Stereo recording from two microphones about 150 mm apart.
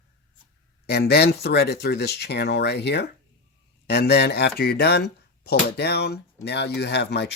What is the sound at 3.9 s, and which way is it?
Speech, 90° left.